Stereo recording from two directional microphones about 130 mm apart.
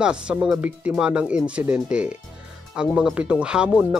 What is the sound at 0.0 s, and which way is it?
Speech, 5° right (ahead or behind).